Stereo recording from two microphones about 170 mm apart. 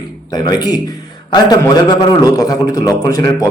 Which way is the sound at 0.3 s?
25° left (ahead or behind).